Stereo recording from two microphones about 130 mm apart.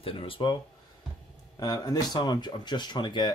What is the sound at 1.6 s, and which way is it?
Speech, 30° left (ahead or behind).